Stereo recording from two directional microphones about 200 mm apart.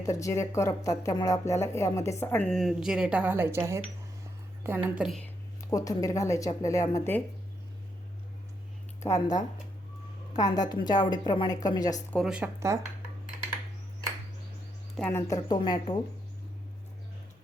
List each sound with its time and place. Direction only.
0.0 s a woman's voice: 15° left (ahead or behind); by 5.2 s 5° right (ahead or behind)
5.7 s a woman's voice: 15° left (ahead or behind)
9.0 s speech: 15° left (ahead or behind)
10.5 s a woman's voice: 20° left (ahead or behind)
12.1 s speech: 5° right (ahead or behind)
14.9 s speech: 5° left (ahead or behind)
15.3 s a woman's voice: 20° left (ahead or behind)